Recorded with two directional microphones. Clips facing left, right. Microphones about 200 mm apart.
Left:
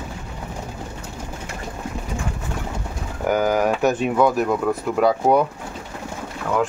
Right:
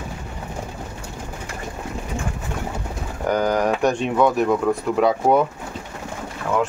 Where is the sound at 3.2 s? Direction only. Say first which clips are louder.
Left 1 dB; 5° left (ahead or behind).